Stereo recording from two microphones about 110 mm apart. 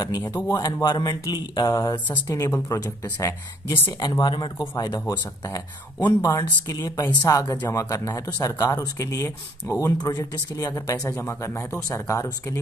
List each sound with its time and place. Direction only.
0.2 s speech: 15° left (ahead or behind)
0.5 s speech: 35° left (ahead or behind)
4.0 s speech: 40° left (ahead or behind)
6.2 s speech: 30° left (ahead or behind)